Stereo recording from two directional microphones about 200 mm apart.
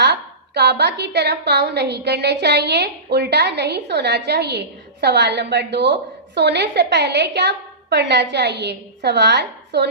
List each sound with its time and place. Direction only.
0.0 s a woman's voice: 55° right (ahead or behind)